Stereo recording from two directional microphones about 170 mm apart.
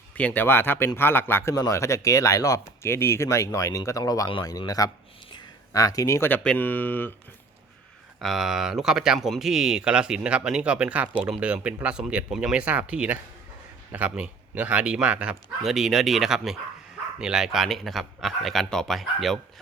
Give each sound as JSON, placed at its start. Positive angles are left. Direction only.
{"t": 0.2, "sound": "speech", "side_deg": 10}
{"t": 8.2, "sound": "speech", "side_deg": 0}